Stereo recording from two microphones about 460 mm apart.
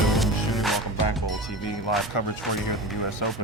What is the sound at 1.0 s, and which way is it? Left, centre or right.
Speech, left.